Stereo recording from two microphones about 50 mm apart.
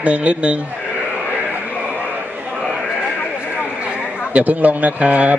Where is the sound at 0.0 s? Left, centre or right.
Right.